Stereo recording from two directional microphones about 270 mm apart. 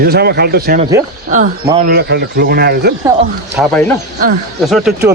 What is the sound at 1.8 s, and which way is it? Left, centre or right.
Speech, right.